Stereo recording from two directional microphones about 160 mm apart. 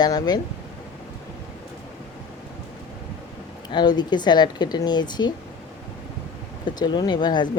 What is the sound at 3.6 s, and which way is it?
Speech, 25° left (ahead or behind).